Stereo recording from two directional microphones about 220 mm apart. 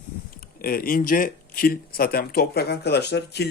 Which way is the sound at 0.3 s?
40° left (ahead or behind).